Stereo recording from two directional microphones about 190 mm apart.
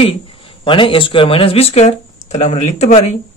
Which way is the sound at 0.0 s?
30° left (ahead or behind).